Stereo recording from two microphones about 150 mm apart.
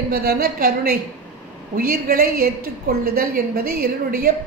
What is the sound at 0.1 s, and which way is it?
A woman's voice, 85° right.